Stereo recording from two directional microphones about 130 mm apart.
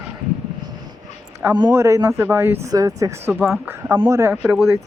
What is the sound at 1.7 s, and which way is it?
Speech, 20° right (ahead or behind).